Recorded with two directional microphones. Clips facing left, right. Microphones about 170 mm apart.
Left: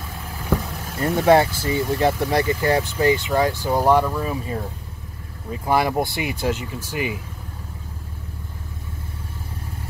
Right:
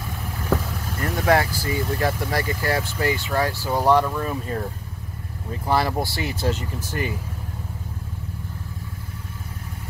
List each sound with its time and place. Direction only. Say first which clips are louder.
0.9 s speech: left 5 dB; 25° left (ahead or behind)